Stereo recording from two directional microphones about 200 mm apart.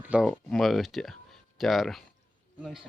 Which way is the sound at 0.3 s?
Centre (ahead or behind).